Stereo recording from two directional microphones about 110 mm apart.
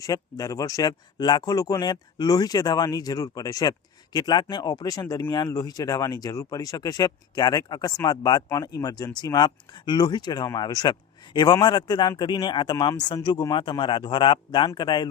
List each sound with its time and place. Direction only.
0.0 s a man's voice: 30° left (ahead or behind)